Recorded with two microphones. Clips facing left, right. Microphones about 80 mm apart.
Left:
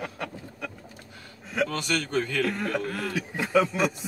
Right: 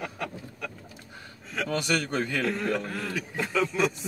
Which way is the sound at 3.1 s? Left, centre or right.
Centre.